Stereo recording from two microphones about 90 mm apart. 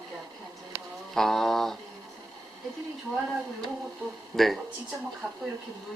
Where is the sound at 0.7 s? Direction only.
35° right (ahead or behind).